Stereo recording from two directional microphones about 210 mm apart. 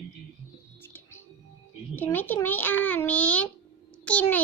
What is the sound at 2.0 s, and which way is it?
Babbling, 10° left (ahead or behind).